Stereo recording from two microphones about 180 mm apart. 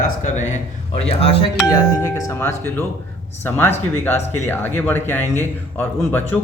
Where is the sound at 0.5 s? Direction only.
35° left (ahead or behind).